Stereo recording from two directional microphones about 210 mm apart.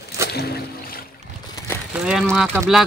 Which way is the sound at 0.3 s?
50° left (ahead or behind).